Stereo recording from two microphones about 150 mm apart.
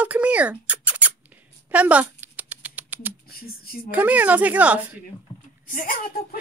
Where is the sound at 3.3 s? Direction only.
90° left.